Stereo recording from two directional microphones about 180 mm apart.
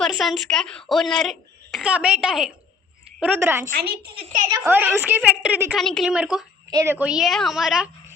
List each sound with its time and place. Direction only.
0.0 s a woman's voice: centre (ahead or behind)
3.7 s a woman's voice: 55° right (ahead or behind)
4.5 s a woman's voice: 10° right (ahead or behind)
5.7 s a woman's voice: centre (ahead or behind)
6.7 s a woman's voice: 15° right (ahead or behind)